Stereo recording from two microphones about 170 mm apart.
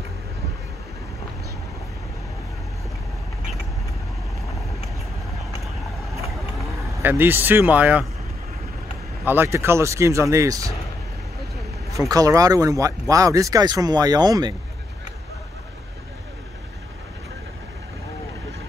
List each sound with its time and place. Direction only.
7.0 s speech: 10° right (ahead or behind)
9.2 s speech: 10° right (ahead or behind)
12.1 s speech: 20° right (ahead or behind)